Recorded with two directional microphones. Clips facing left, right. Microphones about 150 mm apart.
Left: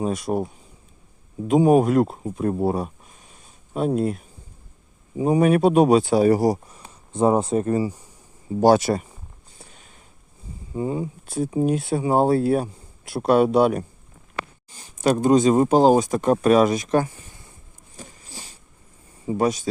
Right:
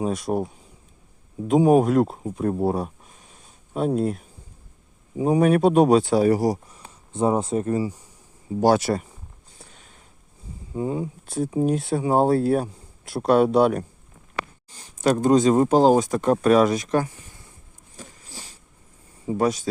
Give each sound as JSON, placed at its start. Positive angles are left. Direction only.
{"t": 0.0, "sound": "speech", "side_deg": 0}
{"t": 7.1, "sound": "speech", "side_deg": 50}
{"t": 8.6, "sound": "speech", "side_deg": 20}
{"t": 10.8, "sound": "speech", "side_deg": 0}
{"t": 17.9, "sound": "a sound", "side_deg": 15}
{"t": 19.2, "sound": "speech", "side_deg": 10}